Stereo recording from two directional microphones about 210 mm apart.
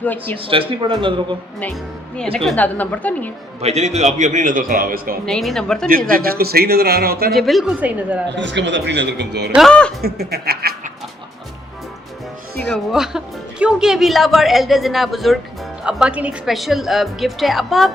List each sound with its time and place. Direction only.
0.0 s speech: 10° left (ahead or behind)
0.4 s a man's voice: 25° right (ahead or behind)
1.5 s speech: 5° left (ahead or behind)
3.6 s a man's voice: 30° right (ahead or behind)
5.2 s speech: centre (ahead or behind)
6.1 s a man's voice: 45° right (ahead or behind)
7.3 s speech: centre (ahead or behind)
8.4 s speech: 60° right (ahead or behind)
9.6 s speech: 5° left (ahead or behind)
10.0 s a man's voice: 50° right (ahead or behind)
12.6 s speech: centre (ahead or behind)